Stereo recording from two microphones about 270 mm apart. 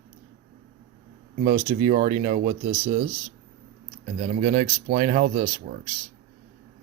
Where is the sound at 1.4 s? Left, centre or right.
Right.